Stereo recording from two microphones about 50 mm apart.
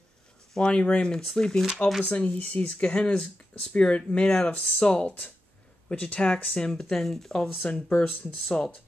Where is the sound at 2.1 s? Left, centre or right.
Left.